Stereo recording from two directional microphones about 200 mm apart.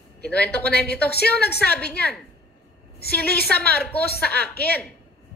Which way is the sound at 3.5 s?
10° left (ahead or behind).